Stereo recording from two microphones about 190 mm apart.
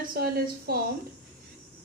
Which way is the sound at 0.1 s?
55° right (ahead or behind).